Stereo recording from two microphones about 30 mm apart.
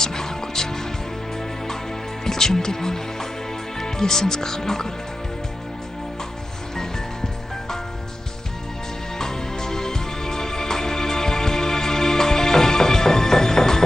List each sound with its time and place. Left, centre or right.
0.0 s music: centre
2.2 s speech: centre
9.2 s music: centre